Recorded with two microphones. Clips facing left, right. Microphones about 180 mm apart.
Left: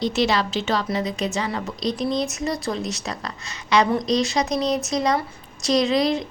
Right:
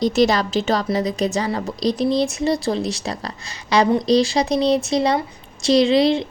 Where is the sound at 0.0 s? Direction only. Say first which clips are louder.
Right 4 dB; 40° right (ahead or behind).